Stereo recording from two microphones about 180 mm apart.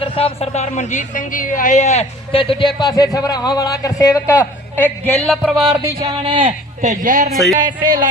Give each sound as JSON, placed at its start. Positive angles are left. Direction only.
{"t": 0.0, "sound": "a woman's voice", "side_deg": 30}
{"t": 4.8, "sound": "speech", "side_deg": 10}
{"t": 5.5, "sound": "music", "side_deg": -10}
{"t": 6.8, "sound": "speech", "side_deg": -45}
{"t": 7.5, "sound": "speech", "side_deg": -20}